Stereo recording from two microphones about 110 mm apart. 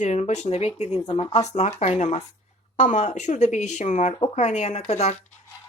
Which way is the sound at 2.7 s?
90° left.